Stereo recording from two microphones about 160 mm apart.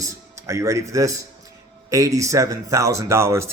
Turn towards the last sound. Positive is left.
turn(degrees=-15)  # may be behind; listen again after turning